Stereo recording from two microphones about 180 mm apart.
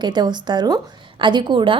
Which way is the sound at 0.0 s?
25° right (ahead or behind).